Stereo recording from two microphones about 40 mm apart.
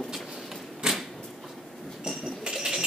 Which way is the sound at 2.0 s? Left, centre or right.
Centre.